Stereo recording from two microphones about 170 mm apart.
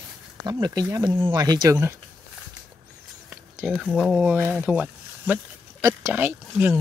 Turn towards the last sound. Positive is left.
turn(degrees=-10)  # may be behind; listen again after turning